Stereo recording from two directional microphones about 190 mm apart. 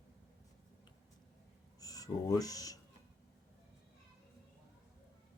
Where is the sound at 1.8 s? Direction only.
20° left (ahead or behind).